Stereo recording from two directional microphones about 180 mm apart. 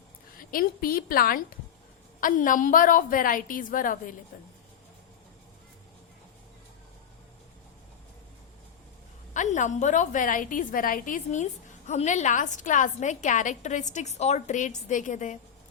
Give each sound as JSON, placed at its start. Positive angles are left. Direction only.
{"t": 0.5, "sound": "a woman's voice", "side_deg": 55}
{"t": 9.3, "sound": "a woman's voice", "side_deg": 45}